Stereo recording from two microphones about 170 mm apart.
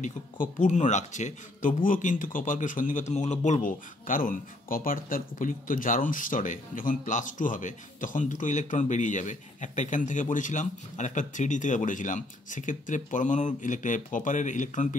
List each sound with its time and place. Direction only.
0.0 s speech: 45° left (ahead or behind)